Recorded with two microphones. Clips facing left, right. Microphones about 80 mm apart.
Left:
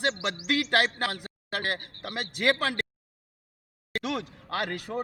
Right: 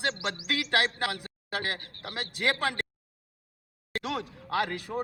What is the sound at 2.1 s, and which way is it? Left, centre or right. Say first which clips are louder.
Speech: left 3 dB; left.